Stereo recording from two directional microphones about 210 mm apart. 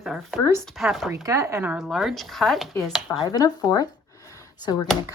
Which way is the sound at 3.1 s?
20° left (ahead or behind).